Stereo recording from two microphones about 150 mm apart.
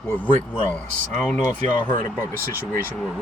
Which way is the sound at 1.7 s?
30° left (ahead or behind).